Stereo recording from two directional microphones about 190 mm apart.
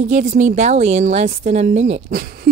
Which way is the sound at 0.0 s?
40° right (ahead or behind).